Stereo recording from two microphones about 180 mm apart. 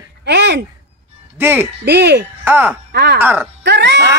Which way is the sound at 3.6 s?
70° right (ahead or behind).